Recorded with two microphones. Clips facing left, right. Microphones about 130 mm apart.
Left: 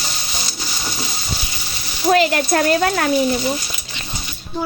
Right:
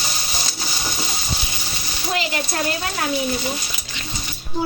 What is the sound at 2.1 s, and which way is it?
Speech, 60° left (ahead or behind).